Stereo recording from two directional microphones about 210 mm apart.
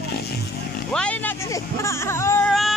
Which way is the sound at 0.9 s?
5° left (ahead or behind).